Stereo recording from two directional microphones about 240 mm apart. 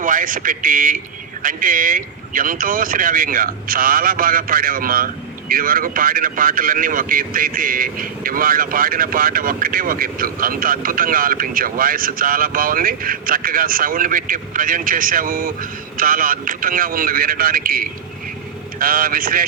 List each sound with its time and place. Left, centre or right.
0.0 s speech: right